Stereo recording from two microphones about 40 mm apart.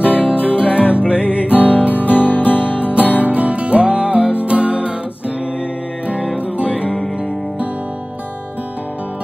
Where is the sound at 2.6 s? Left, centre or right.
Right.